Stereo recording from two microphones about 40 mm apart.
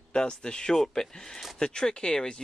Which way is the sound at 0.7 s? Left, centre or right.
Centre.